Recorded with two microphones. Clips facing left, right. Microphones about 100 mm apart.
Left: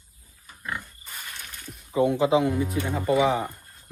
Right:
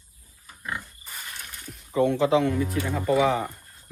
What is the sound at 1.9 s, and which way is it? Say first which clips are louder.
Speech: even; 10° left (ahead or behind).